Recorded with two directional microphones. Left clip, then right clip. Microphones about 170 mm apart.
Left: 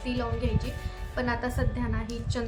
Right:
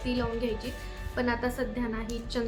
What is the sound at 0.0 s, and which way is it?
A woman's voice, 5° right (ahead or behind).